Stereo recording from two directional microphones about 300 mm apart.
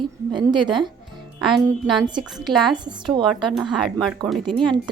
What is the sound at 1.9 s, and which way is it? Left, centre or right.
Speech, centre.